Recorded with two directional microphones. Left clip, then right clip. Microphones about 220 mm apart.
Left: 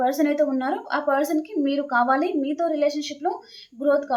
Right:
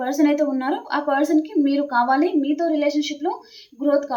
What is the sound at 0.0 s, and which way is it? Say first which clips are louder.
A woman's voice: right 1 dB; 15° left (ahead or behind).